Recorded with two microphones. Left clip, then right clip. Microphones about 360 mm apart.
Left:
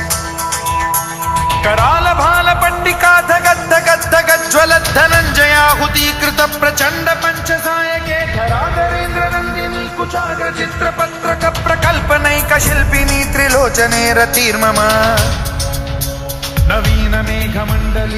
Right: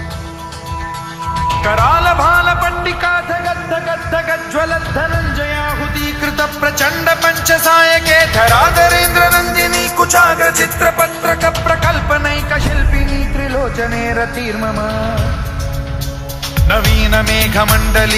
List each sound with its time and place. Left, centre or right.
1.4 s music: centre
3.7 s music: left; by 8.6 s right
8.6 s music: right
10.1 s music: right; by 13.1 s left
13.4 s music: left
16.6 s music: centre; by 18.1 s right